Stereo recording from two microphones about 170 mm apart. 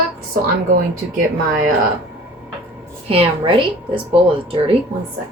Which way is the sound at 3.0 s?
35° right (ahead or behind).